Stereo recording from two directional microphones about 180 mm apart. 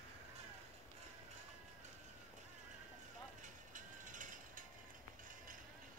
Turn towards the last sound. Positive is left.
turn(degrees=-45)  # may be behind; listen again after turning